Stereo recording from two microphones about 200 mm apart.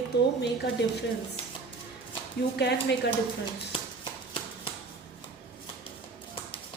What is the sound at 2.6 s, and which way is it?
Speech, 60° left (ahead or behind).